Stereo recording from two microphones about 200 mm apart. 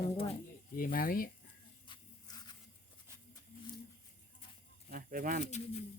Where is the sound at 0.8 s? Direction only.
45° left (ahead or behind).